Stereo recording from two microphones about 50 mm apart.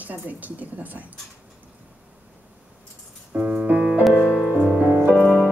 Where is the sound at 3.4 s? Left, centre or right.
Centre.